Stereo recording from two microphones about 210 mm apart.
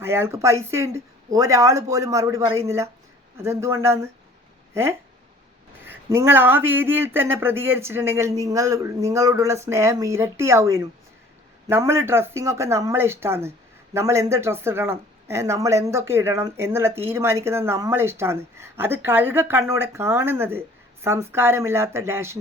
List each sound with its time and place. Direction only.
0.0 s speech: 10° right (ahead or behind)